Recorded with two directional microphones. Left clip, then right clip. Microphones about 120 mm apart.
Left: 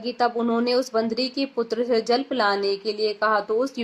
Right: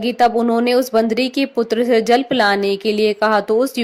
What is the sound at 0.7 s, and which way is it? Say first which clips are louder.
A woman's voice: right 7 dB; 50° right (ahead or behind).